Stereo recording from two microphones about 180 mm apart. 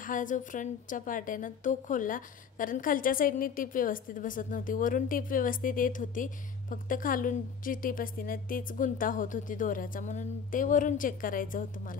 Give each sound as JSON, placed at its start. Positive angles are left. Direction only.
{"t": 0.0, "sound": "a woman's voice", "side_deg": 45}